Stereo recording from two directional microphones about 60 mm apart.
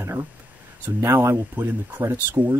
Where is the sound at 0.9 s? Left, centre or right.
Right.